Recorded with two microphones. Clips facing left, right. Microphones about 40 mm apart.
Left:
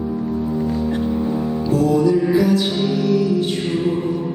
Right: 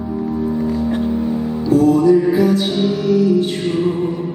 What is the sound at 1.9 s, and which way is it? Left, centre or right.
Music, right.